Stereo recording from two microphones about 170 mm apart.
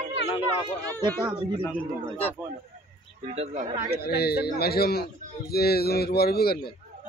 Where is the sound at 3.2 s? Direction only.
40° right (ahead or behind).